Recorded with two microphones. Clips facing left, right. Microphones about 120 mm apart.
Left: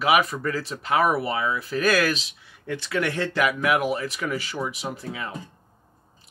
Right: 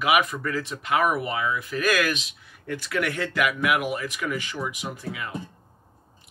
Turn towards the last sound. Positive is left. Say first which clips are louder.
# left 1 dB
turn(degrees=35)  # may be behind; listen again after turning